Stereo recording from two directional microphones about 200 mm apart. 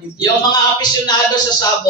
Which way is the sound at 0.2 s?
20° left (ahead or behind).